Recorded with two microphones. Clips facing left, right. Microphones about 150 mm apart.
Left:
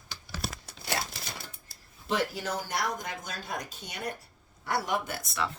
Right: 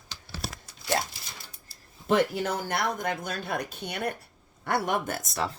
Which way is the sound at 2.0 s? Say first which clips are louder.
Right 6 dB; 55° right (ahead or behind).